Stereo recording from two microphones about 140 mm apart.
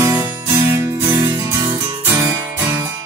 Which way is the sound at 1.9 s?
15° right (ahead or behind).